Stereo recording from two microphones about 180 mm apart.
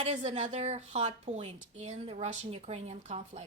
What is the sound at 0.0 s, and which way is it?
Speech, 40° right (ahead or behind).